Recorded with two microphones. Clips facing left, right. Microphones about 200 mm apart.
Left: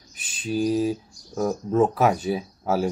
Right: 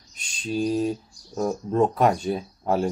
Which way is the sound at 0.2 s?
5° left (ahead or behind).